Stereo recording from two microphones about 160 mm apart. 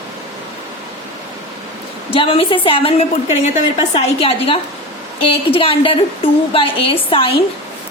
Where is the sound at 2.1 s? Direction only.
35° left (ahead or behind).